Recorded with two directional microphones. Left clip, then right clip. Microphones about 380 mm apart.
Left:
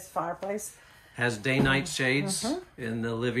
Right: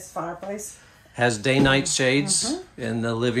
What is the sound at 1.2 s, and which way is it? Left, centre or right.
Speech, centre.